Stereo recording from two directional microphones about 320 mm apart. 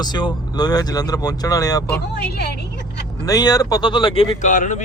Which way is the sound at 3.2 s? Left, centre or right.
Centre.